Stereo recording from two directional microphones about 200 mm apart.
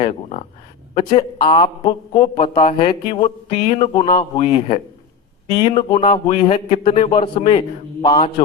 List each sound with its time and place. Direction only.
0.0 s a man's voice: 30° left (ahead or behind)